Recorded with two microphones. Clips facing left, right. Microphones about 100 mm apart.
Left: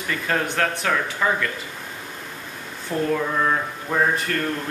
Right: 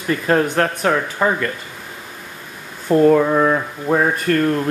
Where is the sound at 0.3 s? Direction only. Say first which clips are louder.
Right 6 dB; 40° right (ahead or behind).